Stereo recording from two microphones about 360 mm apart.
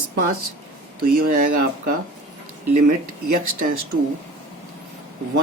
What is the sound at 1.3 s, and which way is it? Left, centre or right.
Speech, right.